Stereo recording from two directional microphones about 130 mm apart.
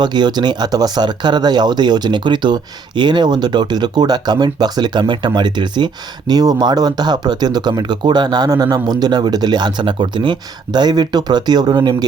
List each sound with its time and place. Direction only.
0.0 s speech: 35° right (ahead or behind)